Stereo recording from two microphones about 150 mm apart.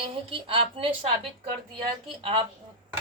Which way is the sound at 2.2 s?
35° right (ahead or behind).